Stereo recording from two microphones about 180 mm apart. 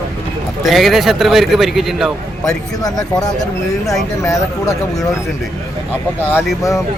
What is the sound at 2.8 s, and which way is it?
Speech, 20° left (ahead or behind).